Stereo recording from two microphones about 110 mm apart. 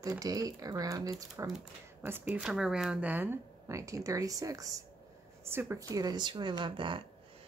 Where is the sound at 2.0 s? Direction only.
20° right (ahead or behind).